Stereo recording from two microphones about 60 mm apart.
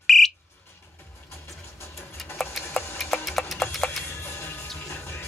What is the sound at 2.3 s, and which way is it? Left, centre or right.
Tick-tock, centre.